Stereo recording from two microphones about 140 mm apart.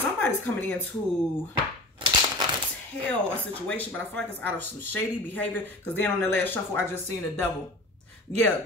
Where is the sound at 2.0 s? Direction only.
35° right (ahead or behind).